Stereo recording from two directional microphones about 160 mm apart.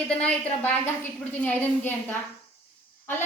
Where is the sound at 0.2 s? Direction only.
10° left (ahead or behind).